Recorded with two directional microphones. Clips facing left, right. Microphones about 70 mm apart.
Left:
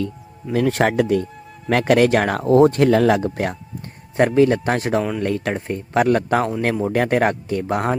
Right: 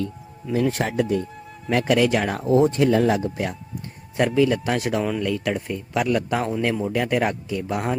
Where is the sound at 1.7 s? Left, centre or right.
Left.